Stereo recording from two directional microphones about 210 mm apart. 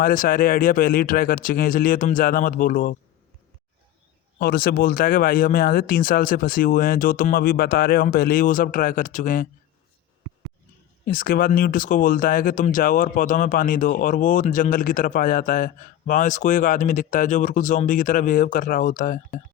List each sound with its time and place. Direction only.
0.0 s speech: 40° left (ahead or behind)
4.4 s speech: 45° left (ahead or behind)
11.0 s speech: 40° left (ahead or behind)